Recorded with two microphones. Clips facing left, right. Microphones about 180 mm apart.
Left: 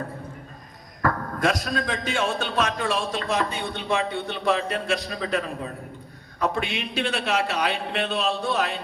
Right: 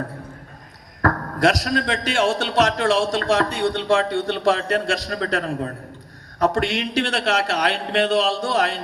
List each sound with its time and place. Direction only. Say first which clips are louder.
1.4 s a man's voice: right 6 dB; 85° right